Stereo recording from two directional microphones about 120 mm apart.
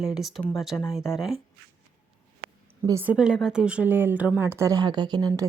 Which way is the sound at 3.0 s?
5° right (ahead or behind).